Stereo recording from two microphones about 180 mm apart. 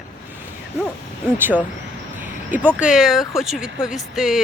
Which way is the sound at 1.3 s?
10° right (ahead or behind).